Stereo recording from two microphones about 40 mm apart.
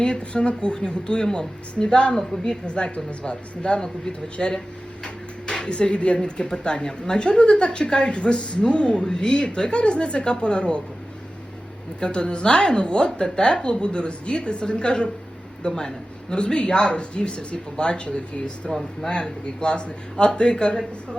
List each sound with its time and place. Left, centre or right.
0.0 s a woman's voice: left
2.6 s a woman's voice: left
5.0 s a sound: left
6.2 s a woman's voice: left
11.9 s a woman's voice: left